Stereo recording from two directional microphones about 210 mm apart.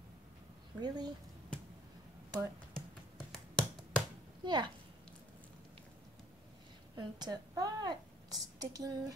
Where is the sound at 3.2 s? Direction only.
Centre (ahead or behind).